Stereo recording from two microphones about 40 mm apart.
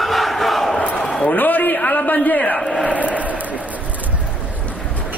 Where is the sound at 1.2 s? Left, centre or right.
Left.